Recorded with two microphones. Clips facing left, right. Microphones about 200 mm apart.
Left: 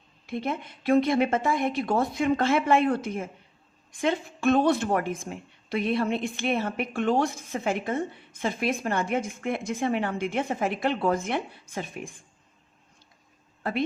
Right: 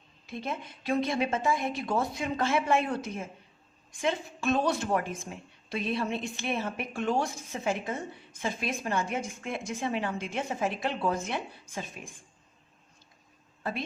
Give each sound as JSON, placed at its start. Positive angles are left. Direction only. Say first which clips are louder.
{"t": 0.3, "sound": "a woman's voice", "louder": "left 5 dB", "side_deg": 60}
{"t": 13.6, "sound": "speech", "louder": "left 6 dB", "side_deg": 60}